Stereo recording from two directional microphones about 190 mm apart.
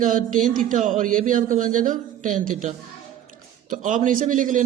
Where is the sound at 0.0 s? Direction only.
45° right (ahead or behind).